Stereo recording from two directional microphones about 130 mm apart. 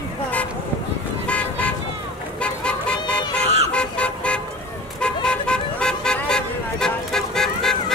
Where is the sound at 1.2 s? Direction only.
10° left (ahead or behind).